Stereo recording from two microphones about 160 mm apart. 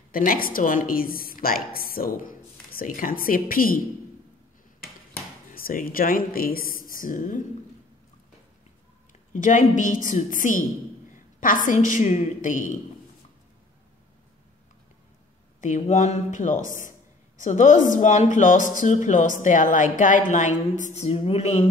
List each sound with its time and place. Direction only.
0.1 s a woman's voice: 60° left (ahead or behind)
5.5 s a woman's voice: 60° left (ahead or behind)
9.3 s a woman's voice: 50° left (ahead or behind)
15.6 s speech: 50° left (ahead or behind)